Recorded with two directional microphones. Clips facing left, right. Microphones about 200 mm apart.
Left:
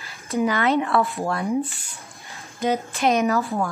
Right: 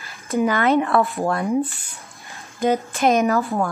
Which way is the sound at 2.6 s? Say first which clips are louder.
Right 3 dB; 50° right (ahead or behind).